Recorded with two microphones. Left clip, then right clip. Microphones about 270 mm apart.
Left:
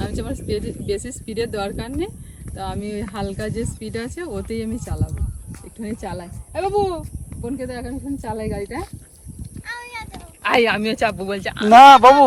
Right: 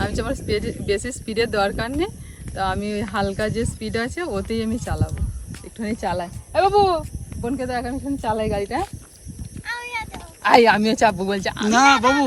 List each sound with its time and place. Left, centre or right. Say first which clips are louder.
0.0 s speech: right 4 dB; centre
9.6 s a sound: right 3 dB; centre
10.4 s speech: right 3 dB; right
11.7 s speech: left 9 dB; centre